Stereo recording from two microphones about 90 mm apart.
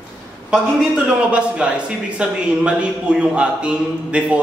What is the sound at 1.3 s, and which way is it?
A man's voice, 10° right (ahead or behind).